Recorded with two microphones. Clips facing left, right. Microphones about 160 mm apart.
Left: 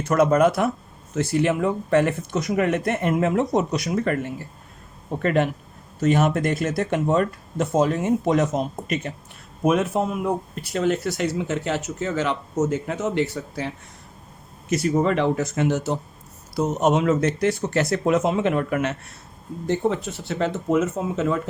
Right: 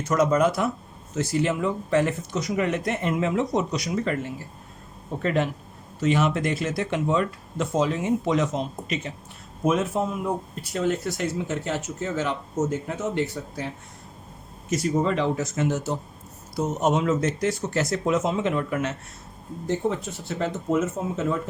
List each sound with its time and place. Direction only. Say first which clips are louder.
0.1 s speech: left 3 dB; 55° left (ahead or behind)
6.0 s speech: left 3 dB; 45° left (ahead or behind)
9.6 s speech: left 3 dB; 65° left (ahead or behind)
14.7 s speech: left 3 dB; 65° left (ahead or behind)